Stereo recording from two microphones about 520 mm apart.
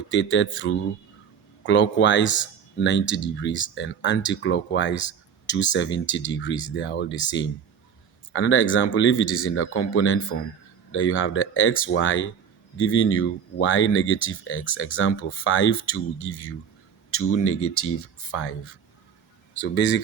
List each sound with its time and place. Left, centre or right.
0.1 s speech: left